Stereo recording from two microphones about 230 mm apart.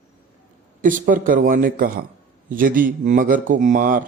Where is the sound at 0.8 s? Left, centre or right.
Right.